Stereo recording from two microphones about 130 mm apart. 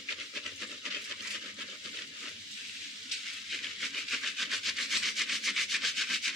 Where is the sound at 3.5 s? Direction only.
Centre (ahead or behind).